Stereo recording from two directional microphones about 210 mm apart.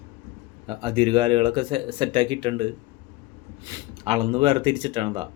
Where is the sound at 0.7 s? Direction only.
25° right (ahead or behind).